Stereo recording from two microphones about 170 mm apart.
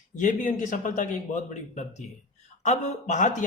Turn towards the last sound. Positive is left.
turn(degrees=45)  # may be behind; listen again after turning